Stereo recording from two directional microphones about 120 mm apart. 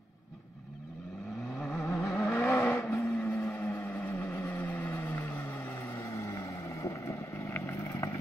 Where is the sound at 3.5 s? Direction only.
25° left (ahead or behind).